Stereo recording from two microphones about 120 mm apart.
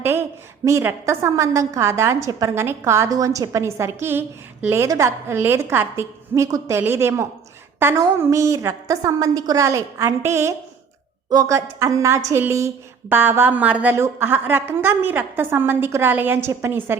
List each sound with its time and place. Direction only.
0.0 s a woman's voice: 20° right (ahead or behind)